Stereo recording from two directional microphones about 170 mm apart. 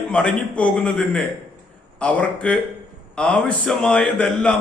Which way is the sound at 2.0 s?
5° left (ahead or behind).